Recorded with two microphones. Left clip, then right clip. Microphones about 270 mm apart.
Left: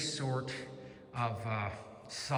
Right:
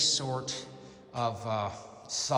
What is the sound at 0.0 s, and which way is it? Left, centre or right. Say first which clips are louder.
A man's voice: right 8 dB; centre.